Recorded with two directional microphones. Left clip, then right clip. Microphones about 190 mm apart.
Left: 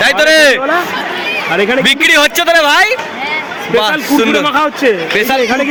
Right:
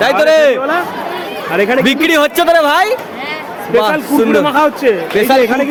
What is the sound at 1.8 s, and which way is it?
A man's voice, 10° right (ahead or behind).